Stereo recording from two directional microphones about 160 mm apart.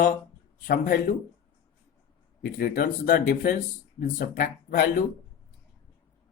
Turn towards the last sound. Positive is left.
turn(degrees=60)  # may be behind; listen again after turning